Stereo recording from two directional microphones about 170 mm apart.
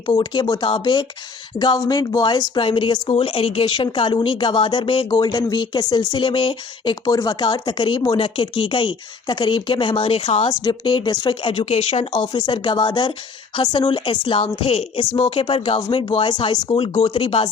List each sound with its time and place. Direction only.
0.0 s speech: 25° left (ahead or behind)